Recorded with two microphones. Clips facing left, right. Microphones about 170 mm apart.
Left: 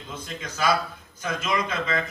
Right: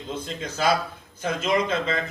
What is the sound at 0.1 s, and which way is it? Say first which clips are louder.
A man's voice: right 5 dB; 30° right (ahead or behind).